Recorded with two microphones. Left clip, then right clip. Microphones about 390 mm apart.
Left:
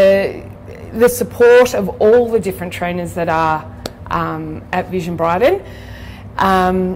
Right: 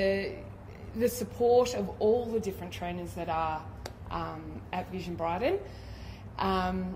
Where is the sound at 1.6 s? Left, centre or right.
Left.